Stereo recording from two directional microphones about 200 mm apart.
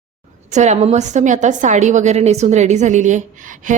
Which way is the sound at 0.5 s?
35° right (ahead or behind).